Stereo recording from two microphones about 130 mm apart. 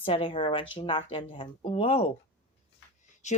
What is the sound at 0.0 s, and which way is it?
A woman's voice, 45° left (ahead or behind).